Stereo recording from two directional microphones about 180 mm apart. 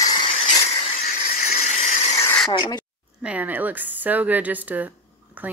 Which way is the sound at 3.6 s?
10° right (ahead or behind).